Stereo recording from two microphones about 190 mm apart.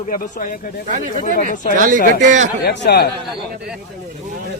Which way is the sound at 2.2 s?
40° right (ahead or behind).